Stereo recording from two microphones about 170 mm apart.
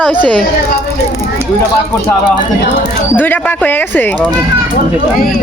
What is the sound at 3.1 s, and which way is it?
Speech, 10° left (ahead or behind).